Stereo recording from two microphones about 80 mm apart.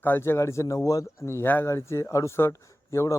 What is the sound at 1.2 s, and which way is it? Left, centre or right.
A man's voice, left.